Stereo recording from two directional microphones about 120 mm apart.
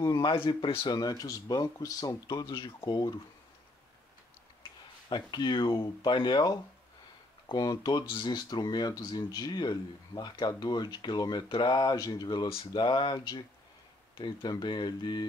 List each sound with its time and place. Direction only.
0.0 s speech: 30° left (ahead or behind)
0.3 s speech: 40° left (ahead or behind)
5.1 s speech: 35° left (ahead or behind)